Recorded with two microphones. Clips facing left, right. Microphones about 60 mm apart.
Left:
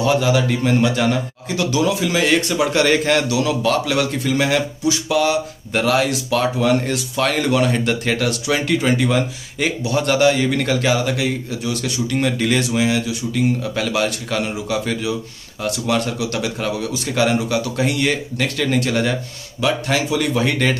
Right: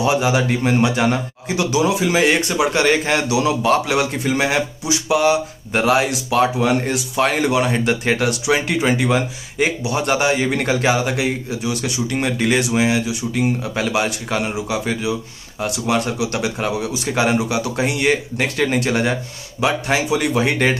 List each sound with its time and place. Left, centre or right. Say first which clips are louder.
0.0 s speech: even; centre